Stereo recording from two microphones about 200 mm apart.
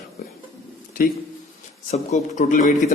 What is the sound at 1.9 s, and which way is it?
A man's voice, 35° left (ahead or behind).